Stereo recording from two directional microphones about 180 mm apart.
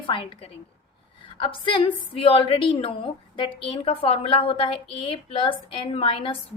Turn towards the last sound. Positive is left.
turn(degrees=30)  # may be behind; listen again after turning